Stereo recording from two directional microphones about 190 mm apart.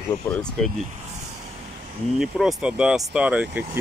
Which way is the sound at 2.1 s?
Centre (ahead or behind).